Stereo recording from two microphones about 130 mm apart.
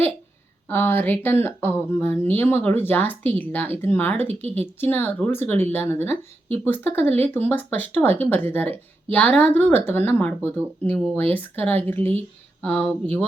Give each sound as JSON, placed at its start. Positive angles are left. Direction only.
{"t": 0.7, "sound": "speech", "side_deg": 15}
{"t": 4.3, "sound": "speech", "side_deg": -55}
{"t": 4.5, "sound": "speech", "side_deg": 15}
{"t": 10.9, "sound": "speech", "side_deg": 5}
{"t": 11.3, "sound": "speech", "side_deg": 15}